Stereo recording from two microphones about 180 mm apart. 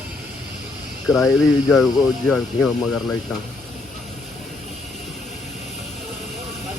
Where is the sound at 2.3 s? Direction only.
Centre (ahead or behind).